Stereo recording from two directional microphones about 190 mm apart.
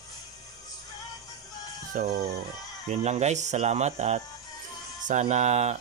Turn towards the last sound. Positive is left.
turn(degrees=-35)  # may be behind; listen again after turning